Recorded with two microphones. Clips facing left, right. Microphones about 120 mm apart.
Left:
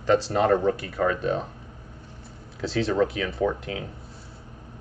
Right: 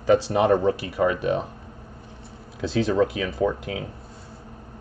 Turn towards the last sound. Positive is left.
turn(degrees=-15)  # may be behind; listen again after turning